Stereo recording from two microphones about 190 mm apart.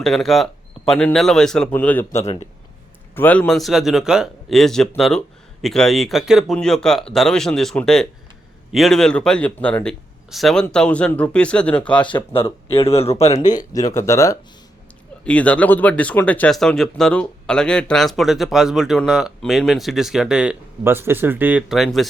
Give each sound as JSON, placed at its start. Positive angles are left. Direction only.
{"t": 0.0, "sound": "speech", "side_deg": 0}
{"t": 12.0, "sound": "speech", "side_deg": 25}
{"t": 13.5, "sound": "speech", "side_deg": 20}